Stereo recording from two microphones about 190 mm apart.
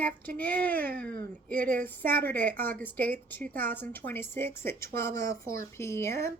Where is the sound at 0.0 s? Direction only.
10° left (ahead or behind).